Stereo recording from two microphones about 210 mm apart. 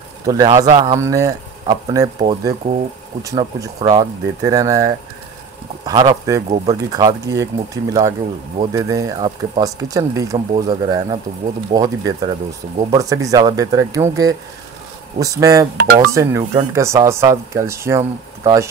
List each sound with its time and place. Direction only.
0.3 s speech: 20° right (ahead or behind)
15.8 s speech: 50° right (ahead or behind)
16.1 s speech: 15° right (ahead or behind)